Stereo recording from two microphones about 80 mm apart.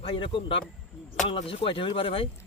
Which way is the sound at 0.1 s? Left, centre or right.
Left.